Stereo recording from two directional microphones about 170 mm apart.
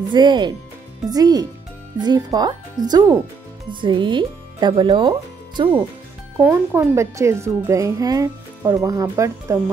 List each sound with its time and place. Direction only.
0.1 s speech: 25° right (ahead or behind)
6.3 s speech: 15° right (ahead or behind)